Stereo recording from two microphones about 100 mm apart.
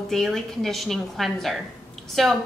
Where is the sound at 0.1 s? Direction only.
5° left (ahead or behind).